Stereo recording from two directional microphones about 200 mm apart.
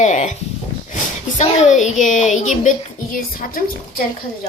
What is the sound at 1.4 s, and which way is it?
A woman's voice, 35° left (ahead or behind).